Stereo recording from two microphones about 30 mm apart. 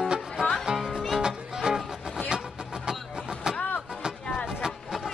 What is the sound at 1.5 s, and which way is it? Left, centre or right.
Music, centre.